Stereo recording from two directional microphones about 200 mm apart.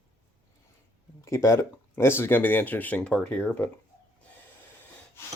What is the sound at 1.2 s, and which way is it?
Speech, 15° left (ahead or behind).